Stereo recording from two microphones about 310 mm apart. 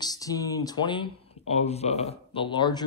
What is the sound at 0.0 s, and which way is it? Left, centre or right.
Speech, centre.